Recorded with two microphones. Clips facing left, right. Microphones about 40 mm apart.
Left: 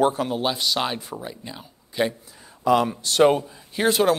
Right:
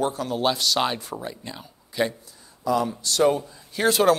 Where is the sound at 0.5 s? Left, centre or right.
Centre.